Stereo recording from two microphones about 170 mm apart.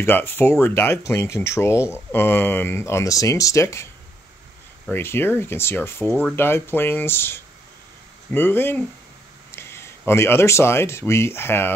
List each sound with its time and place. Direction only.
0.0 s speech: 15° left (ahead or behind)
4.9 s speech: 15° left (ahead or behind)